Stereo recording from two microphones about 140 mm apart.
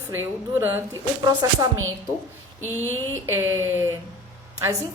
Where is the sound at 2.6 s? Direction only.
20° left (ahead or behind).